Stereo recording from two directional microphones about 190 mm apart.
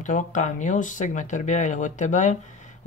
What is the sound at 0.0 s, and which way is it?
Speech, 40° left (ahead or behind).